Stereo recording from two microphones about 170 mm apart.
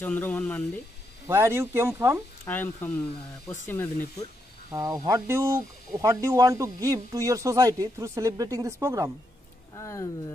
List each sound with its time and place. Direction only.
0.0 s speech: 10° left (ahead or behind)
1.2 s speech: 15° right (ahead or behind)
2.4 s speech: 10° left (ahead or behind)
4.7 s speech: 20° right (ahead or behind)
9.8 s speech: 20° left (ahead or behind)